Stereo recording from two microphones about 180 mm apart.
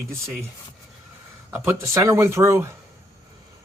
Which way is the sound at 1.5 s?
15° right (ahead or behind).